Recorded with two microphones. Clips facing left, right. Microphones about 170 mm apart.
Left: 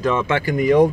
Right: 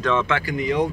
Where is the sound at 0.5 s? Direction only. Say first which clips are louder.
Left 9 dB; 50° left (ahead or behind).